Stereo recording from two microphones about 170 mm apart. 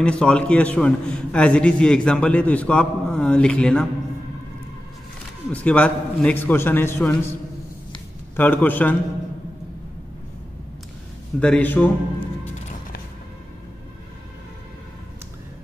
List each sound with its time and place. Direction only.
0.0 s a man's voice: 5° left (ahead or behind)
5.5 s a man's voice: 5° left (ahead or behind)
8.4 s a man's voice: 10° left (ahead or behind)
11.3 s a man's voice: 5° left (ahead or behind)